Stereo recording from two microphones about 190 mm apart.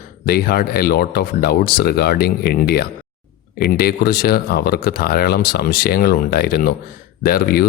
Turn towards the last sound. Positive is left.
turn(degrees=55)  # may be behind; listen again after turning